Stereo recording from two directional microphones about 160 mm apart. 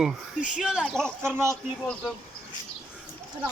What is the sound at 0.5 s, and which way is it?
Speech, 5° right (ahead or behind).